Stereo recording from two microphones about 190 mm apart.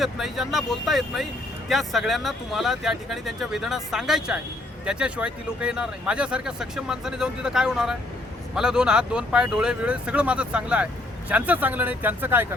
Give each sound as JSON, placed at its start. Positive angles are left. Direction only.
{"t": 0.0, "sound": "speech", "side_deg": 0}